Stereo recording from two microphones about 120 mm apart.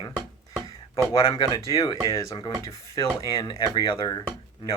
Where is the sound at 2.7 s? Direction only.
30° left (ahead or behind).